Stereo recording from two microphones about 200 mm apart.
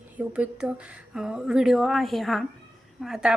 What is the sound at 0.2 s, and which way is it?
A woman's voice, 5° right (ahead or behind).